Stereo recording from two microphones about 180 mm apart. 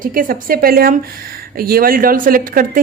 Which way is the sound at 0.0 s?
50° right (ahead or behind).